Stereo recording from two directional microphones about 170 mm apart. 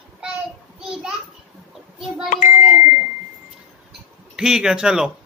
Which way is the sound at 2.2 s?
45° left (ahead or behind).